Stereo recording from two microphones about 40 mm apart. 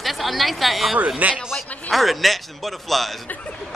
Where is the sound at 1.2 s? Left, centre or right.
Right.